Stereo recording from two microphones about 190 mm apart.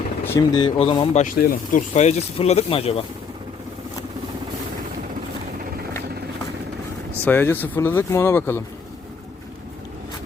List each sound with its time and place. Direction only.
0.3 s speech: 20° left (ahead or behind)
0.8 s speech: 30° left (ahead or behind)
1.2 s speech: 45° left (ahead or behind)
7.3 s speech: 10° left (ahead or behind)